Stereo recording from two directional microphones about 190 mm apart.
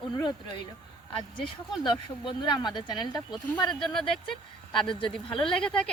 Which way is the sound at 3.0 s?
Centre (ahead or behind).